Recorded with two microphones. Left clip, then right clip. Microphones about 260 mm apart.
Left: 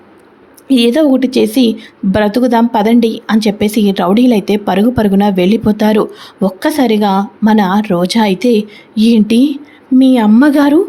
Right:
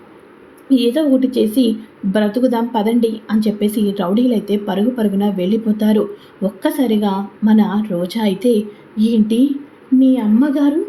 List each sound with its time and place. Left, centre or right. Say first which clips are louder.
0.7 s a woman's voice: left 5 dB; left